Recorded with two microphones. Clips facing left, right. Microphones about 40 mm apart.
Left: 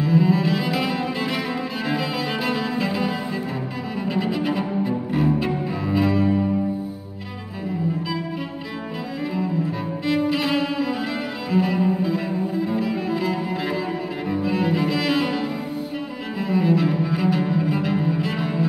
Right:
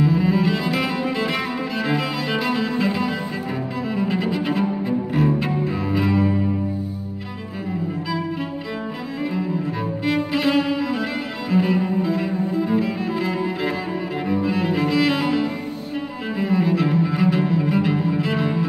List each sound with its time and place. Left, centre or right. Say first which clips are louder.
0.1 s cello: left 1 dB; centre
0.7 s music: right 1 dB; centre
4.6 s cello: right 2 dB; centre
10.0 s cello: right 1 dB; centre
13.5 s music: right 2 dB; centre
14.2 s cello: right 1 dB; centre
16.3 s cello: even; centre